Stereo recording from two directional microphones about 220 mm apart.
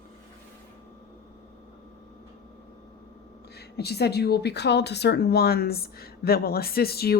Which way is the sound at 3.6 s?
45° left (ahead or behind).